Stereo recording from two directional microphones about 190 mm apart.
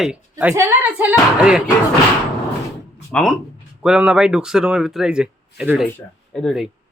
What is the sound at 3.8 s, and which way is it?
A man's voice, 5° right (ahead or behind).